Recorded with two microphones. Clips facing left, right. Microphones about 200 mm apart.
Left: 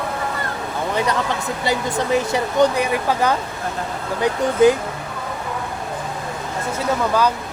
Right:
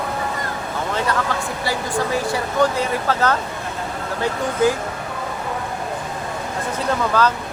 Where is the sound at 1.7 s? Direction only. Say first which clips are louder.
Left 3 dB; 20° left (ahead or behind).